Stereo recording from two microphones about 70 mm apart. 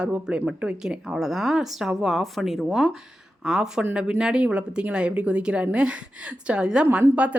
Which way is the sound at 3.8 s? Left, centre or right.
Centre.